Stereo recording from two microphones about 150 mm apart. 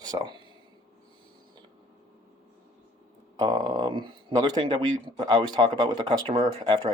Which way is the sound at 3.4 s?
25° right (ahead or behind).